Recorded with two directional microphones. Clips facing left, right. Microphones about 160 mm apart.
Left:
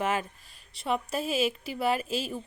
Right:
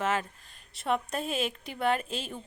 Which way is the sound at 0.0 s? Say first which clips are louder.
Left 1 dB; 10° left (ahead or behind).